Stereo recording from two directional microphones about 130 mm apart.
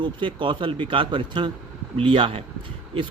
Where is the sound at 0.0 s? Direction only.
40° right (ahead or behind).